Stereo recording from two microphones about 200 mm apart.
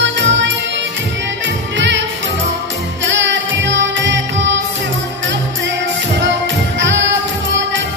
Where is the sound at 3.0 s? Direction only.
65° right (ahead or behind).